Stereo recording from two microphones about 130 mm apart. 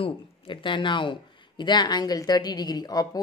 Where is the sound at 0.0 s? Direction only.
40° left (ahead or behind).